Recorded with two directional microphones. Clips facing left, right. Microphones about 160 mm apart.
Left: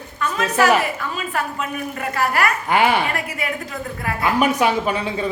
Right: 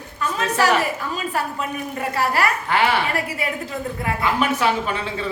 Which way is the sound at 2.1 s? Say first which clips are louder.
Left 1 dB; 30° right (ahead or behind).